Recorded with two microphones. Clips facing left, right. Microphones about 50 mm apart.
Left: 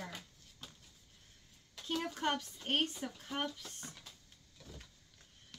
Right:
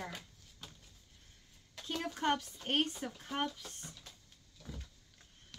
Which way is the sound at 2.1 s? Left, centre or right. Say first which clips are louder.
Right 2 dB; centre.